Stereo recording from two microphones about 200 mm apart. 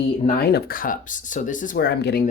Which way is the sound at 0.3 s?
50° left (ahead or behind).